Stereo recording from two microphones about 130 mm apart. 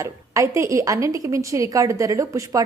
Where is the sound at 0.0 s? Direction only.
20° right (ahead or behind).